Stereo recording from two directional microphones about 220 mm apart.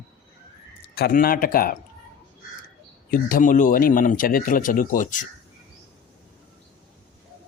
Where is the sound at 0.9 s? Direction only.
45° left (ahead or behind).